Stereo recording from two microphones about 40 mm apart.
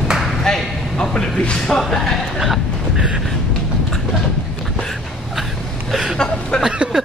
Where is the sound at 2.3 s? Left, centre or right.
Centre.